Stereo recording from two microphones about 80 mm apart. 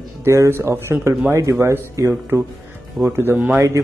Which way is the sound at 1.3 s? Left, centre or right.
Right.